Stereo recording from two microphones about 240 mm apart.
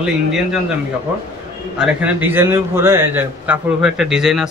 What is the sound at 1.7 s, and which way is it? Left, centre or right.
A man's voice, centre.